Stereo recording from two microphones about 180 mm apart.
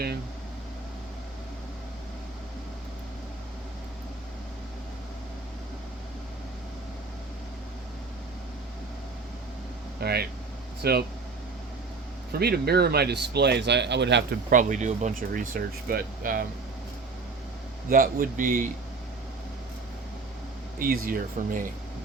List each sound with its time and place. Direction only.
10.0 s speech: 60° right (ahead or behind)
12.3 s speech: 60° right (ahead or behind)
14.5 s speech: 45° right (ahead or behind)
17.8 s speech: 50° right (ahead or behind)
20.7 s speech: 55° right (ahead or behind)